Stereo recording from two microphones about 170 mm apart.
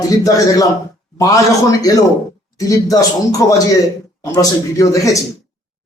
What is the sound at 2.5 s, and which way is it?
A man's voice, 20° left (ahead or behind).